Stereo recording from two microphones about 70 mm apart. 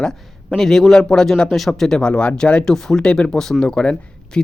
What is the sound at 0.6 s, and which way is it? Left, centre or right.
Speech, centre.